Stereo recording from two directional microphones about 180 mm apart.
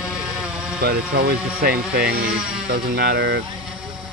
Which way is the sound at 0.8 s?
60° right (ahead or behind).